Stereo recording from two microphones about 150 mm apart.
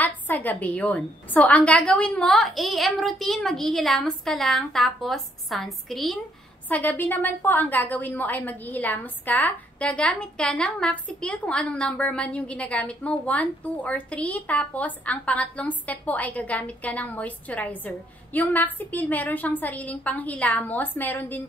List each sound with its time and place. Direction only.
0.0 s a woman's voice: 10° left (ahead or behind)
6.7 s a woman's voice: 10° left (ahead or behind)